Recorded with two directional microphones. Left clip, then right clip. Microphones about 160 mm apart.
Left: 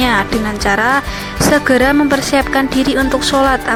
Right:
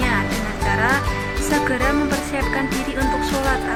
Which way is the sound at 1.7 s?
40° left (ahead or behind).